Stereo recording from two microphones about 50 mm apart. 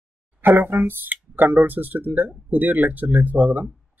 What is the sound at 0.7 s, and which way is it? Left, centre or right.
Speech, right.